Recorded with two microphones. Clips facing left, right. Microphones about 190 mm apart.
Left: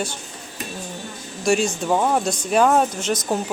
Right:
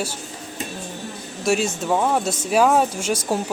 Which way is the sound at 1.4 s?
5° right (ahead or behind).